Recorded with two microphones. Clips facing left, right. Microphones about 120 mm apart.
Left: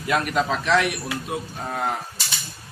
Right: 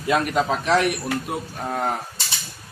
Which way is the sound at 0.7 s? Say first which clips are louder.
Right 1 dB; 35° right (ahead or behind).